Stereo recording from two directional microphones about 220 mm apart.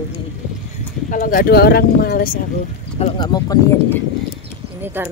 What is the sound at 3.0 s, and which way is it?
Speech, 20° left (ahead or behind).